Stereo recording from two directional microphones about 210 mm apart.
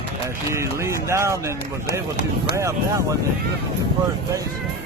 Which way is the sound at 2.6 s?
15° right (ahead or behind).